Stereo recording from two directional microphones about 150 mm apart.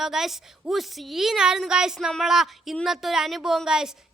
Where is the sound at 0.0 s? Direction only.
5° right (ahead or behind).